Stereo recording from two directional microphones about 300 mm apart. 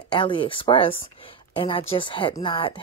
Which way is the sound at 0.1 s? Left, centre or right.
Centre.